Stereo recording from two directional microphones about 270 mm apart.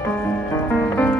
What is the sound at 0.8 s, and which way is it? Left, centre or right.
Music, centre.